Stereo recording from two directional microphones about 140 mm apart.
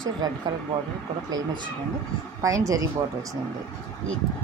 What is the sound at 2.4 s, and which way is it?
Speech, 25° right (ahead or behind).